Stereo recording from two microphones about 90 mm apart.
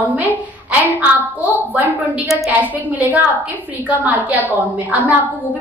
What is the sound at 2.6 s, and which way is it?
A woman's voice, 20° right (ahead or behind).